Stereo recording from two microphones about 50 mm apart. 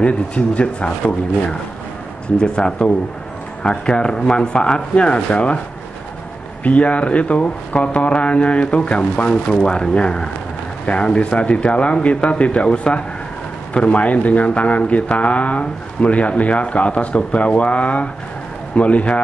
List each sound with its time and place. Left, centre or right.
0.0 s speech: left
2.3 s speech: centre
6.6 s speech: left